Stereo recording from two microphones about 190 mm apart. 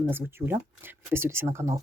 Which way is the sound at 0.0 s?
10° right (ahead or behind).